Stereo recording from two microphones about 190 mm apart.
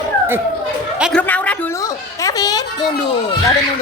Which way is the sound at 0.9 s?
5° right (ahead or behind).